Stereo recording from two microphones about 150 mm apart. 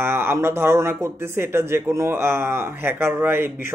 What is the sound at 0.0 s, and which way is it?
Speech, 15° right (ahead or behind).